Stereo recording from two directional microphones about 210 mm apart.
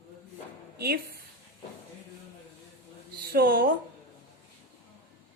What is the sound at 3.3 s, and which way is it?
Speech, 45° right (ahead or behind).